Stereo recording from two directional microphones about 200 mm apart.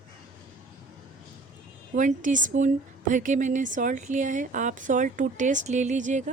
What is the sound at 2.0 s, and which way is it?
Speech, 40° right (ahead or behind).